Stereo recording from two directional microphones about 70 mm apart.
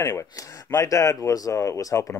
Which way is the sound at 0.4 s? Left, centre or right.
Left.